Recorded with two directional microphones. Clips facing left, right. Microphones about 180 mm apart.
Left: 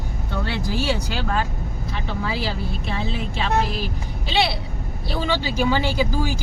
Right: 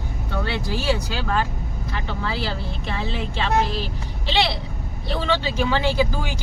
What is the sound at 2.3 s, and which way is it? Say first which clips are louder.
Speech: left 1 dB; 10° left (ahead or behind).